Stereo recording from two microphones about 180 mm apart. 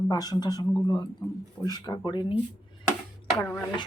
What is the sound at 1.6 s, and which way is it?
Speech, 20° left (ahead or behind).